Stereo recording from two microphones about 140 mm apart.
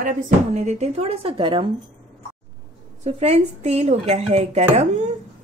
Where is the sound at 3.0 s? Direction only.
50° right (ahead or behind).